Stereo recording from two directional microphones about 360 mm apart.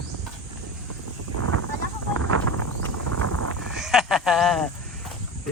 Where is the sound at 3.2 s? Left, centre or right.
Right.